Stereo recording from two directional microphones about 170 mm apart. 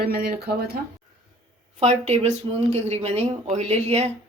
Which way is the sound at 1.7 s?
40° right (ahead or behind).